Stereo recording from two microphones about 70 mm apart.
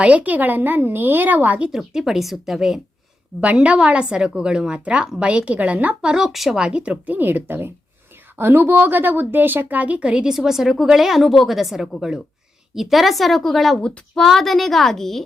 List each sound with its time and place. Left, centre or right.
0.0 s speech: centre
1.7 s a woman's voice: centre
3.4 s speech: centre
10.3 s a woman's voice: centre